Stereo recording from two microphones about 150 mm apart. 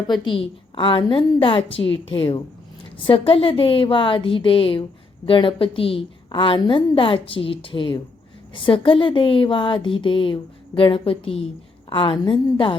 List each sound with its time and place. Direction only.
0.3 s a woman's voice: 35° left (ahead or behind)